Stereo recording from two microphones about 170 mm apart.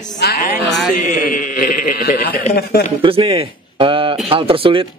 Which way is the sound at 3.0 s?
35° right (ahead or behind).